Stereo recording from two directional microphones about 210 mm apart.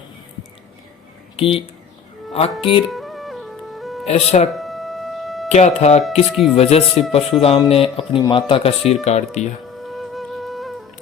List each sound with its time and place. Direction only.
1.4 s speech: 25° left (ahead or behind)
2.9 s music: centre (ahead or behind)
4.0 s speech: 30° left (ahead or behind)
4.5 s music: centre (ahead or behind)
5.5 s speech: 30° left (ahead or behind)
6.0 s speech: centre (ahead or behind)
6.6 s speech: 30° left (ahead or behind)
9.7 s music: centre (ahead or behind)